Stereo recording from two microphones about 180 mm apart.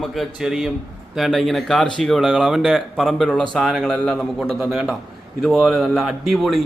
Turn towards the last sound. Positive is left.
turn(degrees=0)  # may be behind; listen again after turning